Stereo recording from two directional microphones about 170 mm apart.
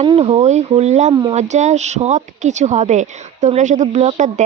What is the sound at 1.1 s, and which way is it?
Speech, 25° right (ahead or behind).